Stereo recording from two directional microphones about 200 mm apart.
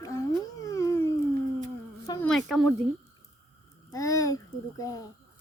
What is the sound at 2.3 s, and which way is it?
Speech, centre (ahead or behind).